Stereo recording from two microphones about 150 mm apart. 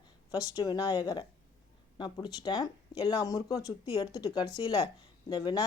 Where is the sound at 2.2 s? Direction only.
30° left (ahead or behind).